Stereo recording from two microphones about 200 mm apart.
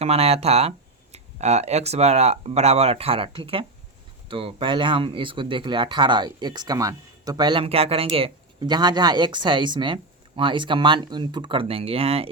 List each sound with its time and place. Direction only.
0.0 s speech: 30° right (ahead or behind)